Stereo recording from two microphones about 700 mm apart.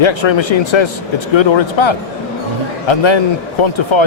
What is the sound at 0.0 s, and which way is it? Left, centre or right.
A man's voice, left.